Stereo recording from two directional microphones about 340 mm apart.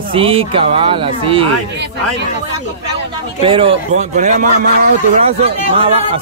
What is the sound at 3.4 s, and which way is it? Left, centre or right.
Speech, centre.